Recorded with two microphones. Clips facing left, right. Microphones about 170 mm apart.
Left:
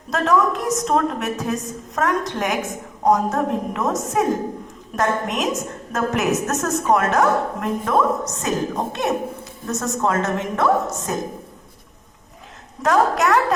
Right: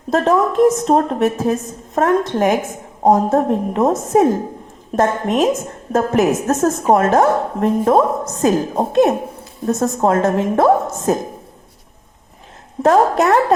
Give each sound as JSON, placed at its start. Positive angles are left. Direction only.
{"t": 0.1, "sound": "a woman's voice", "side_deg": -30}
{"t": 12.8, "sound": "a woman's voice", "side_deg": -35}